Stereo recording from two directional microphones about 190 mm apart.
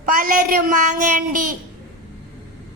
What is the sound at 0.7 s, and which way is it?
Speech, 40° right (ahead or behind).